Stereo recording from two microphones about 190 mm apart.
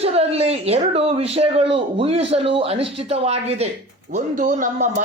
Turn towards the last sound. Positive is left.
turn(degrees=-40)  # may be behind; listen again after turning